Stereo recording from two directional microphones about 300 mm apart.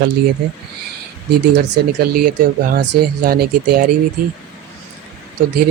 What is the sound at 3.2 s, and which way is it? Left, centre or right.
Speech, right.